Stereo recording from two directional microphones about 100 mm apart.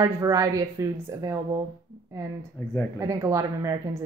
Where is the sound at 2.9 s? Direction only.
30° right (ahead or behind).